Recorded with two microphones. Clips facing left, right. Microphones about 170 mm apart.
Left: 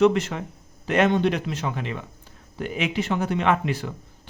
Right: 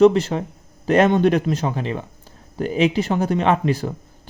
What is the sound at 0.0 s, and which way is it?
Speech, 35° right (ahead or behind).